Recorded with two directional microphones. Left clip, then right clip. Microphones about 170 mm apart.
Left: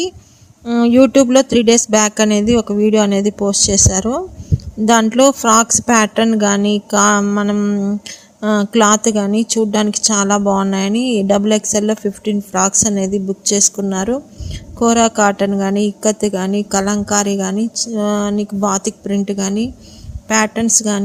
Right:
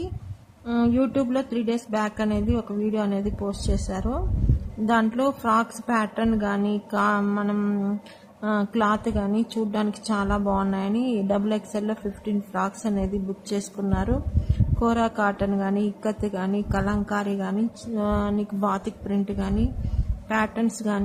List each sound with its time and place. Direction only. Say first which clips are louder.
0.6 s a woman's voice: left 12 dB; 45° left (ahead or behind)
7.5 s speech: left 9 dB; 35° left (ahead or behind)
8.4 s a woman's voice: left 11 dB; 50° left (ahead or behind)